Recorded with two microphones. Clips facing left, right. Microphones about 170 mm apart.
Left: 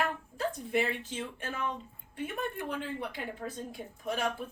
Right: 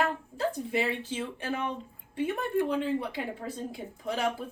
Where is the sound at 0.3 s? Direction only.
20° right (ahead or behind).